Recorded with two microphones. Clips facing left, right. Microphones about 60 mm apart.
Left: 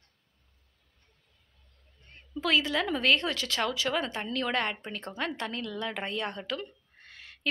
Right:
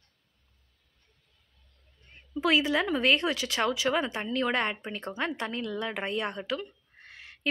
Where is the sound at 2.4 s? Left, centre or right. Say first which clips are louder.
Right 2 dB; centre.